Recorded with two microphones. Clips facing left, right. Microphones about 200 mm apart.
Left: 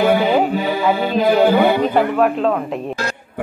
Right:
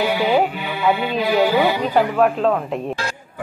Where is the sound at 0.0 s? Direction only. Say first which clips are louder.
Left 5 dB; 50° left (ahead or behind).